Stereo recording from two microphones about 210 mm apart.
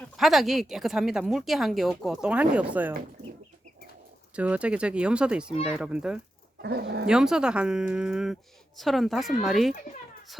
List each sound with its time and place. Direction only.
0.2 s a woman's voice: centre (ahead or behind)
4.4 s a woman's voice: 5° right (ahead or behind)
6.6 s speech: 50° right (ahead or behind)
7.1 s a woman's voice: 5° right (ahead or behind)